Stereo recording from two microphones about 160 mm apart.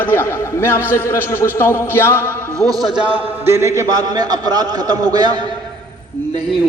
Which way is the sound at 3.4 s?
15° right (ahead or behind).